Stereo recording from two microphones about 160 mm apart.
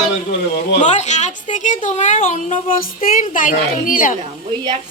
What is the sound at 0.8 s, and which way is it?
A woman's voice, 45° left (ahead or behind).